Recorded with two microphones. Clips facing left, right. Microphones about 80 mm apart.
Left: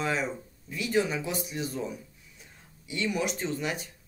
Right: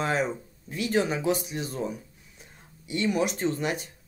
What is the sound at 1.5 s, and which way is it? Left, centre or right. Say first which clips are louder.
Speech: right 2 dB; right.